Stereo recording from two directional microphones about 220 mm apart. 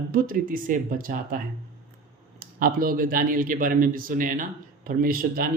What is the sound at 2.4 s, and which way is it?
Speech, 40° right (ahead or behind).